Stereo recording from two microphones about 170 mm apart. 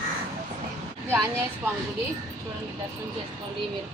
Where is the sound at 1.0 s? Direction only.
15° right (ahead or behind).